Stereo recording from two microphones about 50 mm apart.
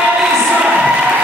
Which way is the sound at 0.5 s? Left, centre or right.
Centre.